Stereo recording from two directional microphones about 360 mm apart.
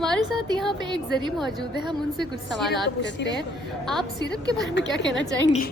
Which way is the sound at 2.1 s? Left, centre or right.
Centre.